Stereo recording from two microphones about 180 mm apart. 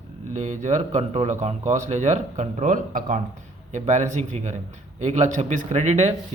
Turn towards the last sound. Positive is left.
turn(degrees=-40)  # may be behind; listen again after turning